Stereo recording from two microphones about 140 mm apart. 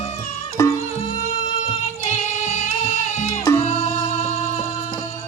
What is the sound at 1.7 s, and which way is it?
Music, 55° left (ahead or behind).